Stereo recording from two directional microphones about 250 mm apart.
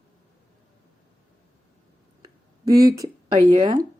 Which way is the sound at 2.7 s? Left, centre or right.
Centre.